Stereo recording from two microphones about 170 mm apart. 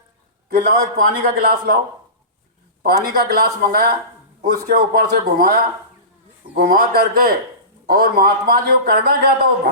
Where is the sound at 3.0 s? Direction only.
60° right (ahead or behind).